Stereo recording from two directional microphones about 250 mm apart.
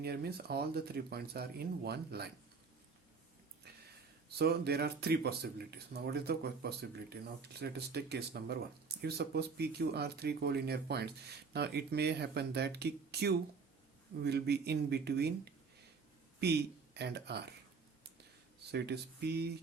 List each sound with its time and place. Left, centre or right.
0.0 s speech: right
4.4 s speech: right
18.7 s speech: right